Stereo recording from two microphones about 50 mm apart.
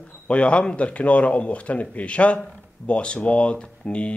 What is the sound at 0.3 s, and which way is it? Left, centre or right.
A man's voice, left.